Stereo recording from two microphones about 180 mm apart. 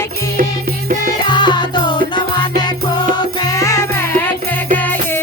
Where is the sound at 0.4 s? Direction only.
50° right (ahead or behind).